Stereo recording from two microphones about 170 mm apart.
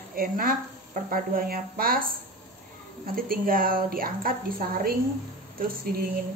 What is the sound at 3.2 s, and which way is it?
Speech, 60° right (ahead or behind).